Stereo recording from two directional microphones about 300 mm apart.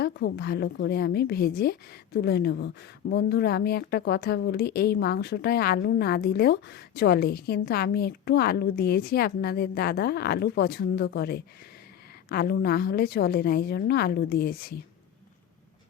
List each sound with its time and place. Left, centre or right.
0.0 s speech: left